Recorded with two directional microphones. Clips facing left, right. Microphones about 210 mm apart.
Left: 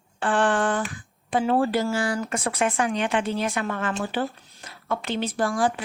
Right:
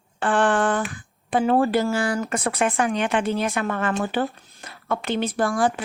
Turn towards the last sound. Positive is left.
turn(degrees=-55)  # may be behind; listen again after turning